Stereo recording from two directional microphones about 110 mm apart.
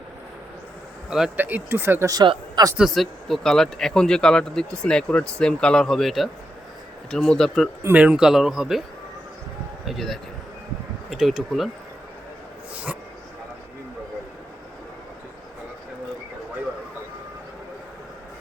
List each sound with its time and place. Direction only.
1.4 s speech: 15° right (ahead or behind)
2.0 s speech: 35° right (ahead or behind)
2.7 s speech: centre (ahead or behind)
7.9 s speech: 10° right (ahead or behind)
9.8 s speech: centre (ahead or behind)